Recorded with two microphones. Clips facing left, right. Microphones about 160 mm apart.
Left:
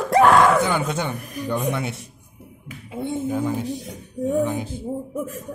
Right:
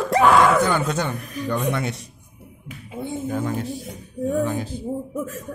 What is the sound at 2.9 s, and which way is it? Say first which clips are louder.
Speech: left 3 dB; 25° left (ahead or behind).